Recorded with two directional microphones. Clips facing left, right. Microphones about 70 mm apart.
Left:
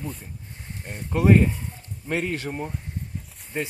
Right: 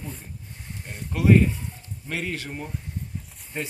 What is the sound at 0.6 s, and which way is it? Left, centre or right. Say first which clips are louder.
Speech: left 2 dB; left.